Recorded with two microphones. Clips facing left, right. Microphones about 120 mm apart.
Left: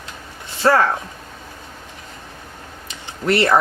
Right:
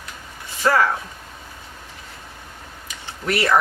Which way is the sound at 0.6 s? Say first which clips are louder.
Left 3 dB; 45° left (ahead or behind).